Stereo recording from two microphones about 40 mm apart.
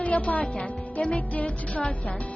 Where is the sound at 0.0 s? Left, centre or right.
Left.